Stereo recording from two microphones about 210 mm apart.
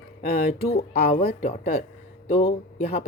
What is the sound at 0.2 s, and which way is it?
Speech, 45° left (ahead or behind).